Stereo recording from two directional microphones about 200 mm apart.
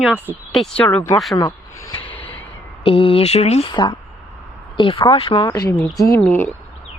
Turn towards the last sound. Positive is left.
turn(degrees=10)  # may be behind; listen again after turning